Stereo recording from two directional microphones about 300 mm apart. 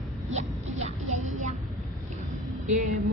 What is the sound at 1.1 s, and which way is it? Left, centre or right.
Vehicle, right.